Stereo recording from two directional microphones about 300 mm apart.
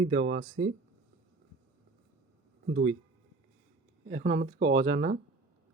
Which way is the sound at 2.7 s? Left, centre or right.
Right.